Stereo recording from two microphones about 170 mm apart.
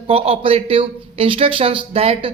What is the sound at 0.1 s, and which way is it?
A woman's voice, 35° right (ahead or behind).